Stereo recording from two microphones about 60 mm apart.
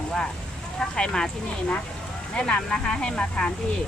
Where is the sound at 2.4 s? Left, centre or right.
Centre.